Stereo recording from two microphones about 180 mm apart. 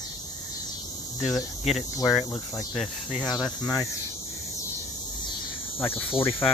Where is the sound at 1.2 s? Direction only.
Centre (ahead or behind).